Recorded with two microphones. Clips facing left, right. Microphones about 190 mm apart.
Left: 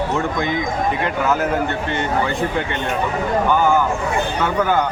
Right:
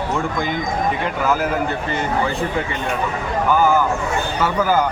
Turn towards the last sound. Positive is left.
turn(degrees=-5)  # may be behind; listen again after turning